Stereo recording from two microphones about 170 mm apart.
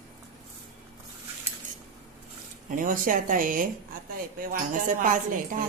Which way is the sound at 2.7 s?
55° right (ahead or behind).